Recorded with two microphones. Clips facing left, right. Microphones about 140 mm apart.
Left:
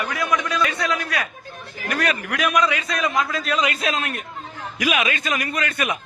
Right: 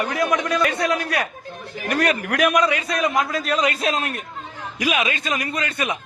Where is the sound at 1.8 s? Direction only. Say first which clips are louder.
Right 3 dB; 30° right (ahead or behind).